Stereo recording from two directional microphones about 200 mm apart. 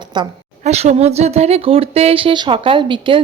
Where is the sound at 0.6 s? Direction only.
35° right (ahead or behind).